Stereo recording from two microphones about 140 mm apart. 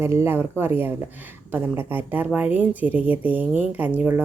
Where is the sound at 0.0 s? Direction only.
15° right (ahead or behind).